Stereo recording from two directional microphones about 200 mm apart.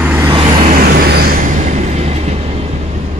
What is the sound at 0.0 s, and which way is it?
Vehicle, 10° right (ahead or behind).